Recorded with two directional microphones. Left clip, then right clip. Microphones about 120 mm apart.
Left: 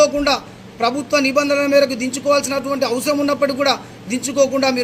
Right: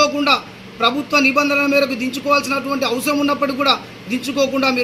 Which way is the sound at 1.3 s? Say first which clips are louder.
Even; 25° left (ahead or behind).